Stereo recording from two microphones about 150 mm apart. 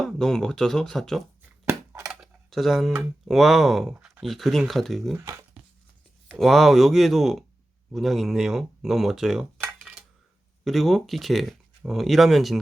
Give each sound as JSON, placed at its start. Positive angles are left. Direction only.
{"t": 0.0, "sound": "speech", "side_deg": 5}
{"t": 1.6, "sound": "a sound", "side_deg": -15}
{"t": 2.0, "sound": "dishes", "side_deg": 0}
{"t": 3.2, "sound": "speech", "side_deg": 0}
{"t": 5.1, "sound": "speech", "side_deg": -20}
{"t": 6.2, "sound": "speech", "side_deg": 0}
{"t": 10.6, "sound": "speech", "side_deg": 0}